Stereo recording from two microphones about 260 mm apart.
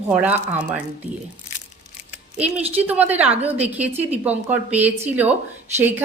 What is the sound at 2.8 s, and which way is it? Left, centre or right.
Speech, centre.